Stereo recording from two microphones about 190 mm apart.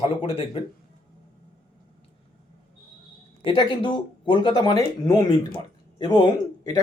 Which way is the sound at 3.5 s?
25° left (ahead or behind).